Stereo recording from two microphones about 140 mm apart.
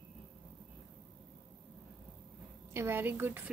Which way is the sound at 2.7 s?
15° right (ahead or behind).